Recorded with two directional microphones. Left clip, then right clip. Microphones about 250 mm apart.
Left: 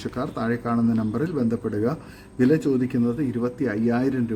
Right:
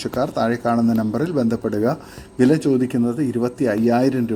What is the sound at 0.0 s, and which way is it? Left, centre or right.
A man's voice, centre.